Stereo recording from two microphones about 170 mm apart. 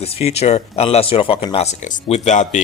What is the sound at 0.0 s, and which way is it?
Speech, 35° left (ahead or behind).